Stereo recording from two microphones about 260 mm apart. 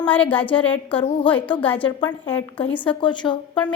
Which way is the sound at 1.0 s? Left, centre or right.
Centre.